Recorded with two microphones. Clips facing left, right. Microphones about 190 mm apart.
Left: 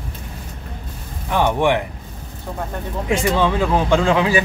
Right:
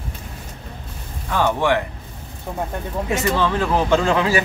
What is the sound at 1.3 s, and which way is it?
Speech, 15° left (ahead or behind).